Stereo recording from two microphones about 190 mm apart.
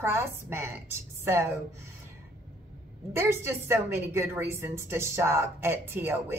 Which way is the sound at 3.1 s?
10° right (ahead or behind).